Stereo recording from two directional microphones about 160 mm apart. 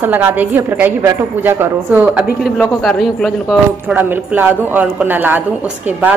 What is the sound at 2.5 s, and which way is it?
Speech, centre (ahead or behind).